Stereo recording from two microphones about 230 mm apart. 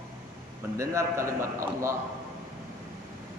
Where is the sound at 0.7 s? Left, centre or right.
Centre.